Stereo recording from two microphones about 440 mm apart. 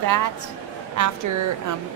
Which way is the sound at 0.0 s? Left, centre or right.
Right.